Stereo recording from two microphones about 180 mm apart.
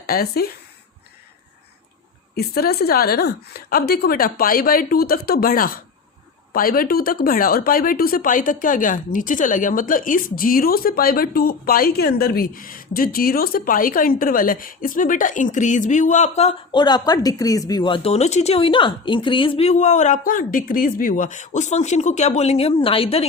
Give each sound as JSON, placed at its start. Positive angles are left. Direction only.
{"t": 0.1, "sound": "a woman's voice", "side_deg": 60}
{"t": 2.3, "sound": "a woman's voice", "side_deg": 60}